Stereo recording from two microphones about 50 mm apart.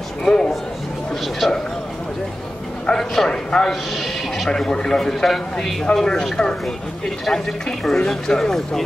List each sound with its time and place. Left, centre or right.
0.2 s a man's voice: centre
1.4 s speech: centre
2.9 s a man's voice: centre
3.9 s a sound: centre
4.5 s a man's voice: centre